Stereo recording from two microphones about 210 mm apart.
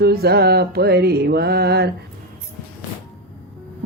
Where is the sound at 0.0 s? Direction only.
50° right (ahead or behind).